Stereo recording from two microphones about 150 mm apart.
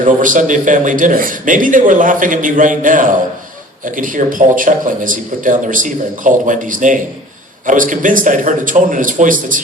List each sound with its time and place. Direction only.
0.0 s a man's voice: 60° right (ahead or behind)